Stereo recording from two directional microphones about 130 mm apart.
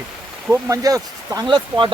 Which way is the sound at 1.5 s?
40° right (ahead or behind).